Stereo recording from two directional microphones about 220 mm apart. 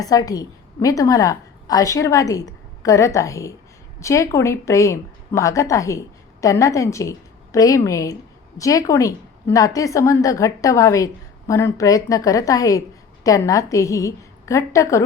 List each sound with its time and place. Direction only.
0.0 s a woman's voice: 15° left (ahead or behind)